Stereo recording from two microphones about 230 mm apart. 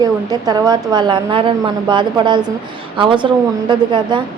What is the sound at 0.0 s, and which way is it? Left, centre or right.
A woman's voice, centre.